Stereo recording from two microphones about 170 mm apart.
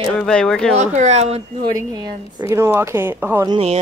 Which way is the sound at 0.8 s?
45° right (ahead or behind).